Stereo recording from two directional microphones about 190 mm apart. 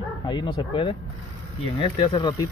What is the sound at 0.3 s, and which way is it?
Speech, 25° left (ahead or behind).